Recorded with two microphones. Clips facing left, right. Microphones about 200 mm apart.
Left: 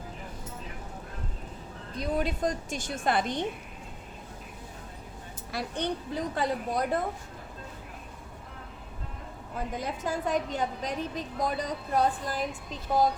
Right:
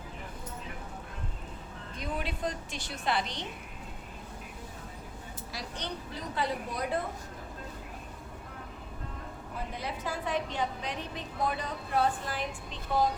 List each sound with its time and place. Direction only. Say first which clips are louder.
2.0 s a woman's voice: left 6 dB; 40° left (ahead or behind)
5.5 s a woman's voice: left 8 dB; 55° left (ahead or behind)
9.7 s a woman's voice: left 5 dB; 45° left (ahead or behind)